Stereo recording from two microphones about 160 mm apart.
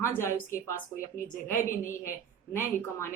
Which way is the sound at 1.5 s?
55° left (ahead or behind).